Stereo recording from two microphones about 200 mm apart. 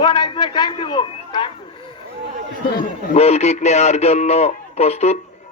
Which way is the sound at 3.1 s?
30° left (ahead or behind).